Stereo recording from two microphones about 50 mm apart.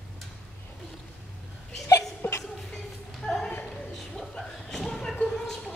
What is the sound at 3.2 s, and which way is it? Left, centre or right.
Speech, centre.